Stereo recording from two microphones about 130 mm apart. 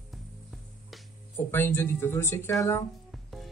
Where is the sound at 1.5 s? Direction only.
20° left (ahead or behind).